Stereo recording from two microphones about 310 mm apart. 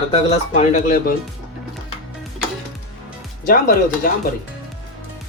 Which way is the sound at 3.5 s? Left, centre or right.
Left.